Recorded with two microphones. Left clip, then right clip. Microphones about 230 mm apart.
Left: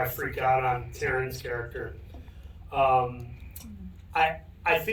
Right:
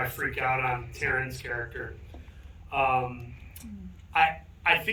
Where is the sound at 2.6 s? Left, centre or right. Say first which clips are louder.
Left 3 dB; centre.